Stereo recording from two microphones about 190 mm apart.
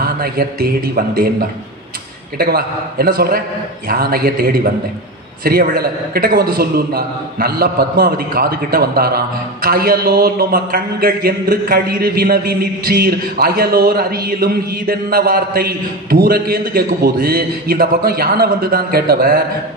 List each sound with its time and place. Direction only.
0.0 s a man's voice: 55° right (ahead or behind)